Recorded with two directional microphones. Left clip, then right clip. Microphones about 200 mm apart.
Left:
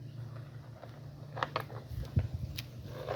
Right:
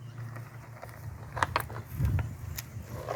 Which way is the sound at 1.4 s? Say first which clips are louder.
Right 6 dB; 55° right (ahead or behind).